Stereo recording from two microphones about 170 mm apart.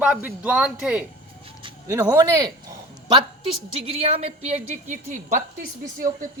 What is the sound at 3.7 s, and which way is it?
A woman's voice, 35° right (ahead or behind).